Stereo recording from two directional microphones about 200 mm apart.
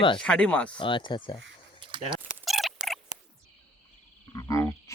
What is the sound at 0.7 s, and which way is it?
Speech, 25° left (ahead or behind).